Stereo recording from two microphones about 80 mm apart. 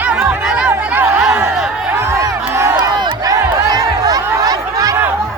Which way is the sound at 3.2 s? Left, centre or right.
Right.